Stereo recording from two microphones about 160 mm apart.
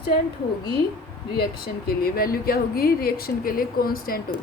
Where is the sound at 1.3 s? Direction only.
75° left (ahead or behind).